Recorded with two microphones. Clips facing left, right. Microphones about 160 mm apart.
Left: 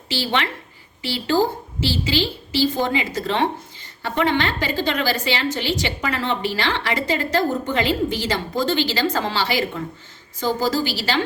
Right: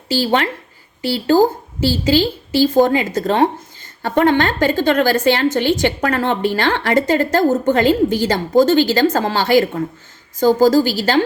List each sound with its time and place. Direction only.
0.1 s a woman's voice: 45° right (ahead or behind)